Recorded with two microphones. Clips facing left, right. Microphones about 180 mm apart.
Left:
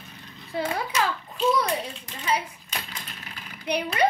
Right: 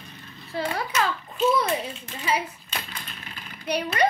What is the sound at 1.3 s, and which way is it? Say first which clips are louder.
Speech: right 2 dB; 5° right (ahead or behind).